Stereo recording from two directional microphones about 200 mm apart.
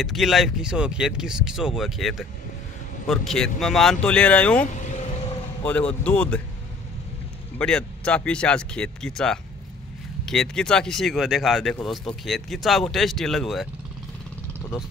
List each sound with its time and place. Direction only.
0.0 s speech: centre (ahead or behind)
4.6 s vehicle: 35° left (ahead or behind)
5.7 s speech: 5° left (ahead or behind)
7.5 s speech: 5° left (ahead or behind)